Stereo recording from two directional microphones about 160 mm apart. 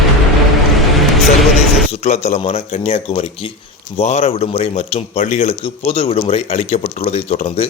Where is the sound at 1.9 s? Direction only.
40° left (ahead or behind).